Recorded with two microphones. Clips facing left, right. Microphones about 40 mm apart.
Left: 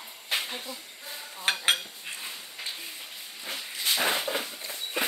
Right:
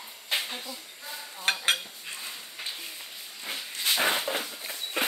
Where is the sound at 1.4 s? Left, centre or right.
Centre.